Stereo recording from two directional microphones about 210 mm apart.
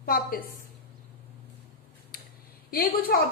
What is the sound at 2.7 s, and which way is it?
Speech, 45° left (ahead or behind).